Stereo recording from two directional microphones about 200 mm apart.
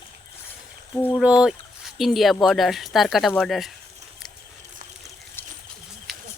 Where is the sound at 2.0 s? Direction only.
Centre (ahead or behind).